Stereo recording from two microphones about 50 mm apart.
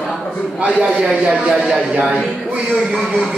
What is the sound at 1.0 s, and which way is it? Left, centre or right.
Speech, right.